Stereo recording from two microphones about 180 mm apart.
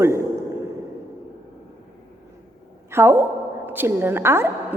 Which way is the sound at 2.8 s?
15° right (ahead or behind).